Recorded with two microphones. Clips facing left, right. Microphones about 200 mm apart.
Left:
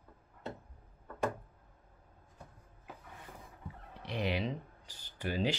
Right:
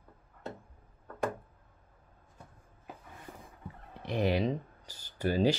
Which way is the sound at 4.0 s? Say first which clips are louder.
Right 6 dB; 45° right (ahead or behind).